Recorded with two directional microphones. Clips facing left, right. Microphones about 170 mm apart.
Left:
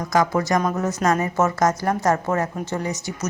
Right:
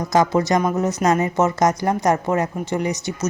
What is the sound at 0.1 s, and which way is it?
A woman's voice, 20° right (ahead or behind).